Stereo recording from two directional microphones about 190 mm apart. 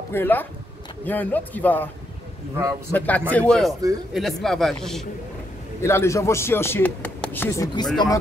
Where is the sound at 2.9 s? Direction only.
10° left (ahead or behind).